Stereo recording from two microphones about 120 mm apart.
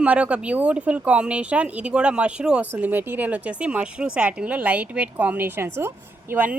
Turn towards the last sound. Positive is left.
turn(degrees=-15)  # may be behind; listen again after turning